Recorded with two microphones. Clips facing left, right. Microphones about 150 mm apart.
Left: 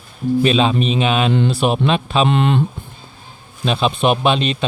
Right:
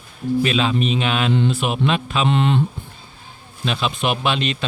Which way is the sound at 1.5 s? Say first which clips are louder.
Left 4 dB; 30° left (ahead or behind).